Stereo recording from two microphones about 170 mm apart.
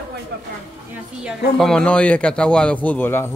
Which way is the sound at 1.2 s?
Centre (ahead or behind).